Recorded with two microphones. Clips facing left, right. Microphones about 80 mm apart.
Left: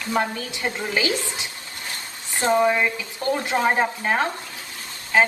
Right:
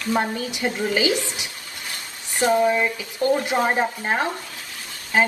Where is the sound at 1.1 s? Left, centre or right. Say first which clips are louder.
Right 2 dB; left.